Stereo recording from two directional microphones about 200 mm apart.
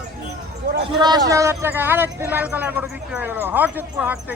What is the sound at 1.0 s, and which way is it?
Speech, 20° right (ahead or behind).